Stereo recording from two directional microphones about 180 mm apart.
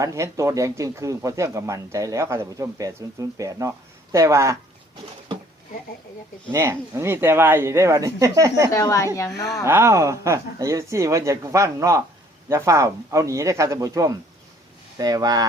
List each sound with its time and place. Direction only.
0.0 s speech: 15° right (ahead or behind)
6.5 s speech: 15° right (ahead or behind)
8.7 s a woman's voice: 15° left (ahead or behind)
9.6 s speech: 15° right (ahead or behind)